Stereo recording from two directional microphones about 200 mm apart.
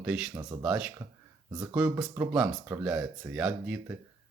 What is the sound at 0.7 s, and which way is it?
Speech, 5° right (ahead or behind).